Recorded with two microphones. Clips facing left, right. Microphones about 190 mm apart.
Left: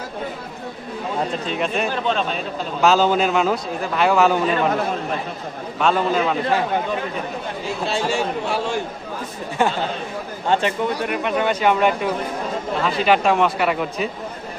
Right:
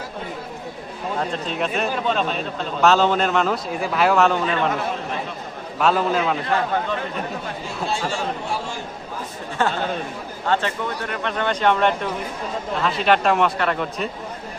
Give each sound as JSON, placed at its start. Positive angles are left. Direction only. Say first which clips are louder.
{"t": 1.3, "sound": "speech", "louder": "left 1 dB", "side_deg": 0}
{"t": 5.8, "sound": "speech", "louder": "left 1 dB", "side_deg": -5}
{"t": 7.9, "sound": "a man's voice", "louder": "left 3 dB", "side_deg": 70}
{"t": 9.6, "sound": "speech", "louder": "left 1 dB", "side_deg": 10}